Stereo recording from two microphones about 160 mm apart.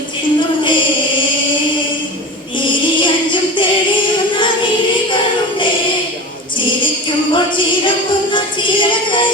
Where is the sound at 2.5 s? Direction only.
30° left (ahead or behind).